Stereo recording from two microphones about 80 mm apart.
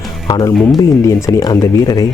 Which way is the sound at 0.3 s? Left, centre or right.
Left.